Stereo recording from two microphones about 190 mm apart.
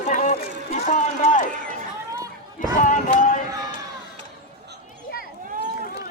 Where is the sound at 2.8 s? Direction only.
45° left (ahead or behind).